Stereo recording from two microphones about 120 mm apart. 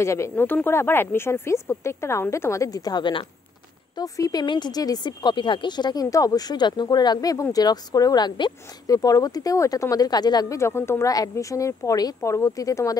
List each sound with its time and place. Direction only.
0.0 s speech: 25° left (ahead or behind); by 3.3 s 40° left (ahead or behind)
3.9 s speech: 30° left (ahead or behind)
10.6 s speech: 20° left (ahead or behind)